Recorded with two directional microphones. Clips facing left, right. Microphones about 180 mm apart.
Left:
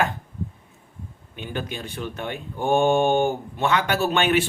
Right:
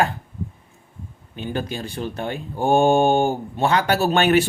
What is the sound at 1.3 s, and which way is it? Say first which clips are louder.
Speech: right 4 dB; 35° right (ahead or behind).